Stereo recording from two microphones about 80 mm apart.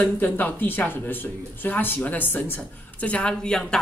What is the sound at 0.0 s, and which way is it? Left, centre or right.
Speech, left.